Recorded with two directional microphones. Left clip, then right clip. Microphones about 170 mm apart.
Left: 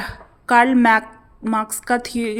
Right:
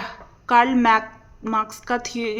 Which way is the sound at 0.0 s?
25° left (ahead or behind).